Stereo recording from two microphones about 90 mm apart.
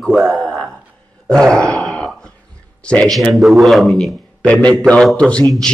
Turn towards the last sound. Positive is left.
turn(degrees=5)  # may be behind; listen again after turning